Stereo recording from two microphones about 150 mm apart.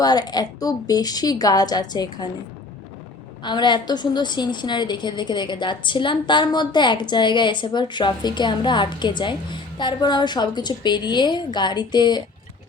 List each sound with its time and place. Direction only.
0.0 s a woman's voice: 25° left (ahead or behind)
3.4 s a woman's voice: 30° left (ahead or behind)